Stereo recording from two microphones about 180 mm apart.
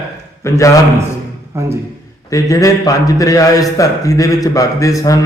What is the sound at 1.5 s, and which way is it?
Speech, 15° right (ahead or behind).